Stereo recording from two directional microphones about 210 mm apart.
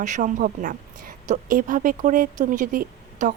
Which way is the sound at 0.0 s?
35° right (ahead or behind).